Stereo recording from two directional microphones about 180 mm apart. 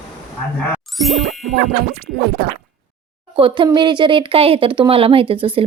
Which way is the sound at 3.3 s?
30° right (ahead or behind).